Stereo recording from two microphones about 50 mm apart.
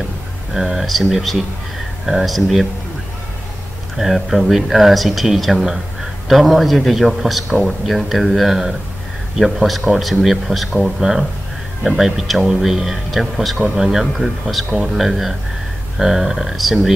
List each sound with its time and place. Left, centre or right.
0.6 s a man's voice: centre
3.9 s a man's voice: centre